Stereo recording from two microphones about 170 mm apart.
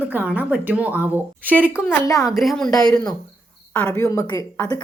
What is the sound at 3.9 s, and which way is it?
Speech, 15° left (ahead or behind).